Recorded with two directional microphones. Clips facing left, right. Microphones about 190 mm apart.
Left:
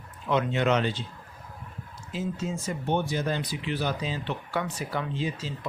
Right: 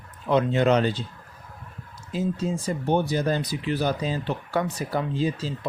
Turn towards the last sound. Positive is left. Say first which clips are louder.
# right 5 dB
turn(degrees=-35)  # may be behind; listen again after turning